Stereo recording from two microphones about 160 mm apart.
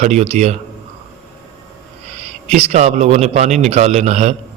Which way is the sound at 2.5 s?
45° right (ahead or behind).